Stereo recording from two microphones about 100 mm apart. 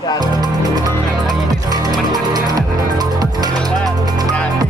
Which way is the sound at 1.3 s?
40° right (ahead or behind).